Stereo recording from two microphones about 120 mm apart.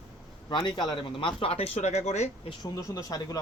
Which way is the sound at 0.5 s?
40° left (ahead or behind).